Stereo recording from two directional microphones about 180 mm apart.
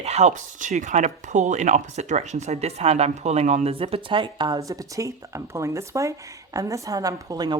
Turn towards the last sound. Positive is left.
turn(degrees=-20)  # may be behind; listen again after turning